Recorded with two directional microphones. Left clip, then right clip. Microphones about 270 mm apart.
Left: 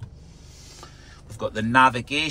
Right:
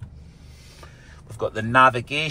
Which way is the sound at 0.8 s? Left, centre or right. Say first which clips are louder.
Left 1 dB; centre.